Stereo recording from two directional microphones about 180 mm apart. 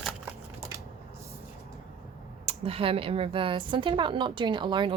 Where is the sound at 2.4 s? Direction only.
30° right (ahead or behind).